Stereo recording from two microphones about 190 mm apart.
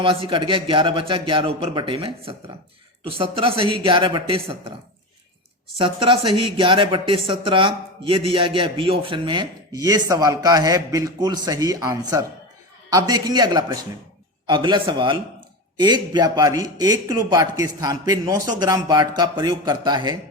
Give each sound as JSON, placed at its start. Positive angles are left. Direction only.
{"t": 0.0, "sound": "speech", "side_deg": -30}
{"t": 5.7, "sound": "speech", "side_deg": -30}